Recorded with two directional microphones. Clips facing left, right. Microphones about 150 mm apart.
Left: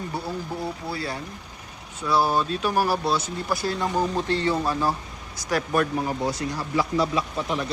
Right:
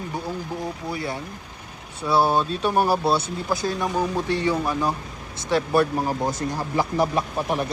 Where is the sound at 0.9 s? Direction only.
20° right (ahead or behind).